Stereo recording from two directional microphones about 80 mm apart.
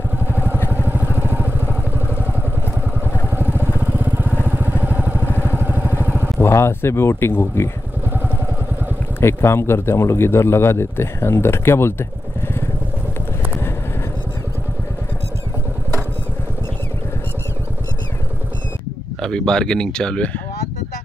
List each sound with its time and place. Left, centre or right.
0.3 s vehicle: right
3.3 s vehicle: right
6.4 s a man's voice: left
9.2 s a man's voice: left
19.2 s speech: centre